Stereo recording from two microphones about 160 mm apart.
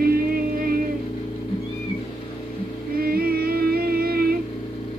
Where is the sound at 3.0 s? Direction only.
70° right (ahead or behind).